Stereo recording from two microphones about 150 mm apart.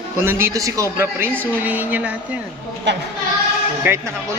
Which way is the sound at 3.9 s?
15° right (ahead or behind).